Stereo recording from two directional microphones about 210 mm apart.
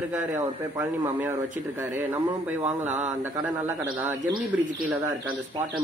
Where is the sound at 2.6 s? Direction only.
35° right (ahead or behind).